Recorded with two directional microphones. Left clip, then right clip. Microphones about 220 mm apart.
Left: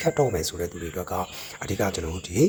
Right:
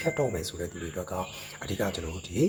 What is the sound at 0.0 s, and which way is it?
Speech, 35° left (ahead or behind).